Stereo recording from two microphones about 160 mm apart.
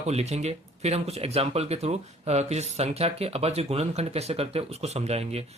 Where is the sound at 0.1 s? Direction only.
40° right (ahead or behind).